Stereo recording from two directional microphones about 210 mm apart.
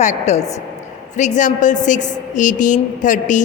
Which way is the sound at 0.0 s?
35° left (ahead or behind).